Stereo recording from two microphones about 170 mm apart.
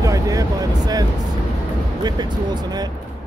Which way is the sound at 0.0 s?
20° right (ahead or behind).